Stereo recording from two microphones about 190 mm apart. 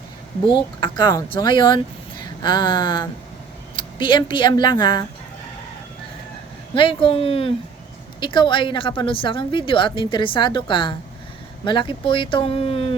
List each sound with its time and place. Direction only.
0.4 s a woman's voice: 25° left (ahead or behind)
6.7 s a woman's voice: 25° left (ahead or behind)